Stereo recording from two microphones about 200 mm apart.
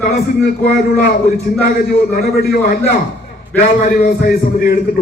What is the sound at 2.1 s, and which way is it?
A man's voice, 50° left (ahead or behind).